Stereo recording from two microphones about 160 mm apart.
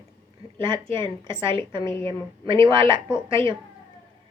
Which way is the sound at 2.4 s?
35° right (ahead or behind).